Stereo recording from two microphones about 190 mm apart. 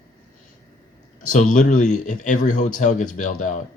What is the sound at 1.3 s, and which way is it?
Speech, 40° left (ahead or behind).